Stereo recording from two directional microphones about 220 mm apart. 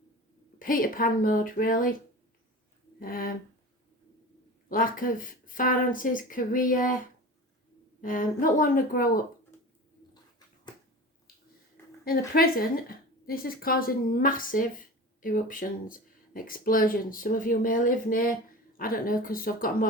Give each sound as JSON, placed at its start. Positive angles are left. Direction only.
{"t": 0.6, "sound": "speech", "side_deg": 40}
{"t": 3.0, "sound": "speech", "side_deg": 40}
{"t": 4.7, "sound": "speech", "side_deg": 40}
{"t": 8.0, "sound": "speech", "side_deg": 40}
{"t": 12.0, "sound": "speech", "side_deg": 40}